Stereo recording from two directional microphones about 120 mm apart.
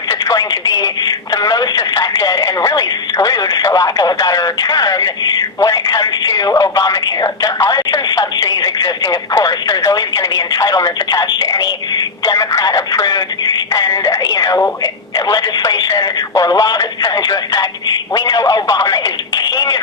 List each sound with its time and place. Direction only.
0.1 s speech: 30° left (ahead or behind)
15.9 s speech: 25° left (ahead or behind)